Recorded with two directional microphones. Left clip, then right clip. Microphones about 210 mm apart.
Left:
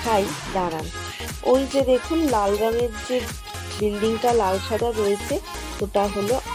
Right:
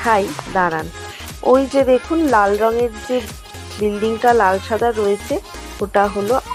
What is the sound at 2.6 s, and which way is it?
Speech, centre (ahead or behind).